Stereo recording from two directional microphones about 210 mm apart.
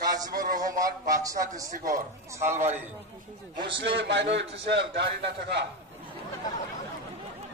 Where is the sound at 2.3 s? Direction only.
10° right (ahead or behind).